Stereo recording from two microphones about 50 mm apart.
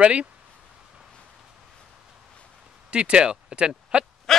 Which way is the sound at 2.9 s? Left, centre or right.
Right.